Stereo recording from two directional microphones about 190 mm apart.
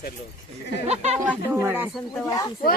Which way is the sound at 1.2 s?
10° right (ahead or behind).